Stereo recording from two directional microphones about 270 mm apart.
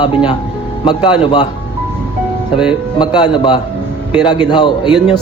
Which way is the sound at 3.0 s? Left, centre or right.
Centre.